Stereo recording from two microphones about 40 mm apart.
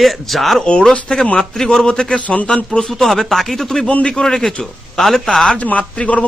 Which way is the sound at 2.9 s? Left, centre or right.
Centre.